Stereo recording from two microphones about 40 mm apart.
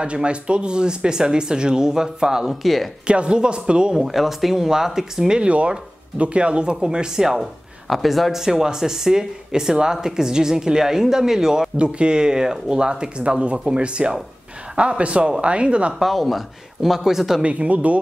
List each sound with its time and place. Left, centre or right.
0.0 s speech: right
2.6 s speech: centre
3.1 s speech: right
4.0 s speech: centre
5.5 s speech: right; by 7.4 s centre
7.9 s speech: centre
11.7 s speech: right
15.9 s speech: centre
17.4 s speech: right